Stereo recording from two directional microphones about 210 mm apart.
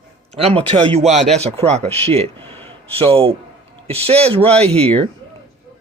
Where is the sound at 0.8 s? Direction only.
30° right (ahead or behind).